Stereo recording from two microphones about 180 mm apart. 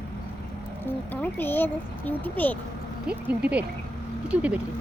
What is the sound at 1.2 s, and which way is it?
Speech, 10° left (ahead or behind).